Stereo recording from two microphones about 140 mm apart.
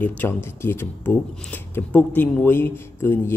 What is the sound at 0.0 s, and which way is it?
Speech, 15° left (ahead or behind).